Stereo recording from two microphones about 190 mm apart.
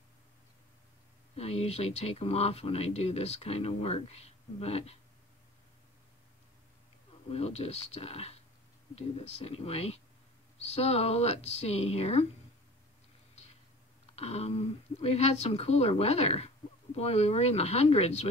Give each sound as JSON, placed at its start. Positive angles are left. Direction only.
{"t": 1.3, "sound": "a woman's voice", "side_deg": 30}
{"t": 7.2, "sound": "a woman's voice", "side_deg": 35}
{"t": 14.1, "sound": "a woman's voice", "side_deg": 35}